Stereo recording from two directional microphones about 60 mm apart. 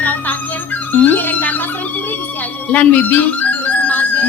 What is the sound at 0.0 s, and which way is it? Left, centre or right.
Music, left.